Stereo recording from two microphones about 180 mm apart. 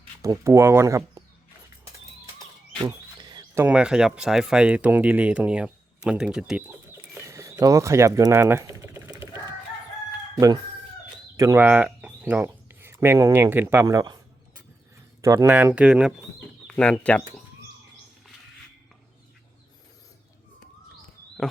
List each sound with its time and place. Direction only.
0.2 s speech: 15° right (ahead or behind)
2.8 s a sound: 25° right (ahead or behind)
3.6 s speech: 5° right (ahead or behind)
7.1 s typing: 15° right (ahead or behind)
11.3 s speech: 15° right (ahead or behind)
15.2 s speech: 15° right (ahead or behind)
15.4 s speech: 5° right (ahead or behind)
16.6 s speech: 5° left (ahead or behind)